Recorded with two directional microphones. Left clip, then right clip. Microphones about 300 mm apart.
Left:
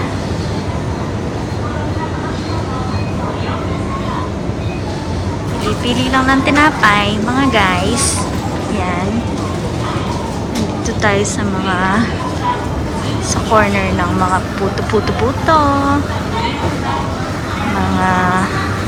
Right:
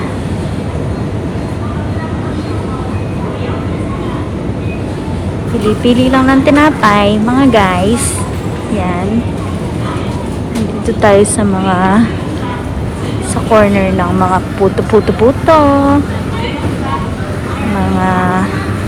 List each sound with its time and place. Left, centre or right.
5.8 s speech: centre
10.8 s speech: centre
13.5 s speech: centre
15.4 s speech: centre
18.0 s speech: centre